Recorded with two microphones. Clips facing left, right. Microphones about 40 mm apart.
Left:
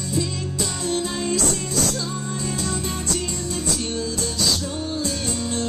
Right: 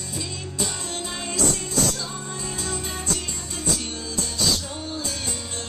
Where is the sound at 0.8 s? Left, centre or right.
Right.